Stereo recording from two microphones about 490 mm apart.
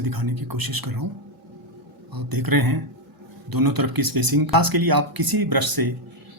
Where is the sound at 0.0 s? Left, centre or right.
Right.